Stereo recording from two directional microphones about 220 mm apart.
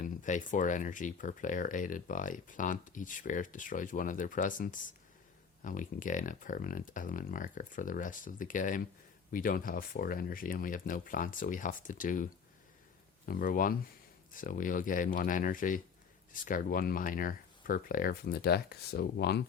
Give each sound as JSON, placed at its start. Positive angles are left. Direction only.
{"t": 0.0, "sound": "speech", "side_deg": 35}